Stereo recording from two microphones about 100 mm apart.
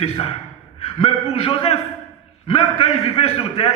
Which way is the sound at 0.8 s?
65° left (ahead or behind).